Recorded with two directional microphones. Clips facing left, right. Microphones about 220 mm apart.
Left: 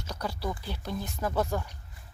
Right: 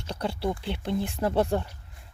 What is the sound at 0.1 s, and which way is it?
Speech, 30° right (ahead or behind).